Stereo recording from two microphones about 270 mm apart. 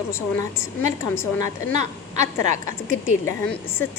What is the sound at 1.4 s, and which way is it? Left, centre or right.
A woman's voice, right.